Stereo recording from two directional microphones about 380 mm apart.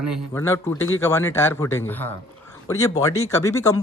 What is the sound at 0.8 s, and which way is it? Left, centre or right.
Speech, left.